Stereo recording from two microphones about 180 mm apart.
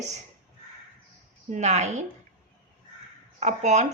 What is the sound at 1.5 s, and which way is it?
Speech, 40° right (ahead or behind).